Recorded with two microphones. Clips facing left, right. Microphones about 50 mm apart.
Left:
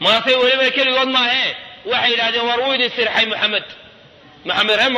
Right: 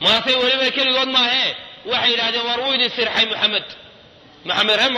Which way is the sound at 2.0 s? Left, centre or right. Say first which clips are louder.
Left 3 dB; left.